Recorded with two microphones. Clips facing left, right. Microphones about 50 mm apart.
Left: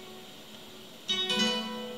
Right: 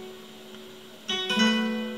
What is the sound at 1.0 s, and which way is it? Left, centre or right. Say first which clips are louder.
Guitar: right 5 dB; right.